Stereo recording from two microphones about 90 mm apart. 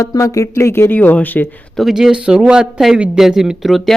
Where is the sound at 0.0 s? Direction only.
35° left (ahead or behind); by 1.5 s 20° left (ahead or behind).